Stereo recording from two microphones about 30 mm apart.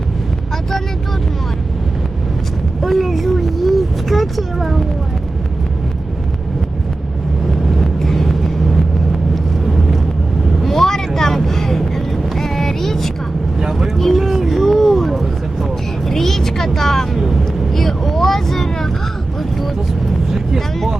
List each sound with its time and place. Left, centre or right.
2.8 s vehicle: centre
7.8 s vehicle: centre
10.6 s vehicle: centre
13.6 s vehicle: centre
13.8 s vehicle: centre
14.6 s a sound: centre
16.0 s music: centre
16.6 s vehicle: centre